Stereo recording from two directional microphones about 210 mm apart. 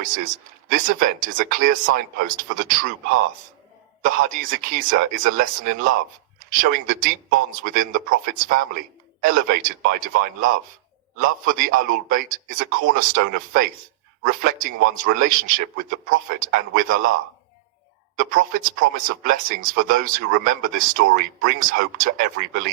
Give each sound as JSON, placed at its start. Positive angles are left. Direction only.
{"t": 0.0, "sound": "speech", "side_deg": -40}
{"t": 4.0, "sound": "speech", "side_deg": -40}
{"t": 18.2, "sound": "speech", "side_deg": -40}